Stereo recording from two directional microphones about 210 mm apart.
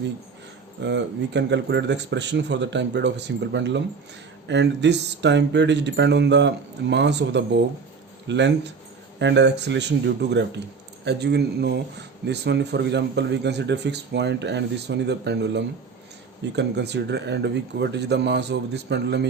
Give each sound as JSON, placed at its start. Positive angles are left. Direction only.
{"t": 0.8, "sound": "a man's voice", "side_deg": -55}